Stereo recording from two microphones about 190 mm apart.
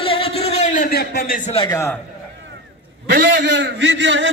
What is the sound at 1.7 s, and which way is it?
Speech, 15° left (ahead or behind).